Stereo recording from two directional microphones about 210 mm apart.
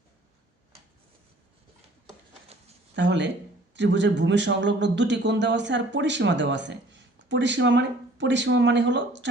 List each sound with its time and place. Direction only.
2.9 s a man's voice: 55° right (ahead or behind)